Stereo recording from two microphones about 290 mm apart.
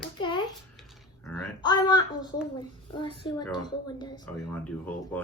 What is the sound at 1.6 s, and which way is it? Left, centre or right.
A woman's voice, centre.